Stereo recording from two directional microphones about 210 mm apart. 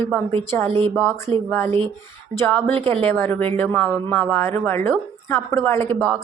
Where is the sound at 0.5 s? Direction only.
10° left (ahead or behind).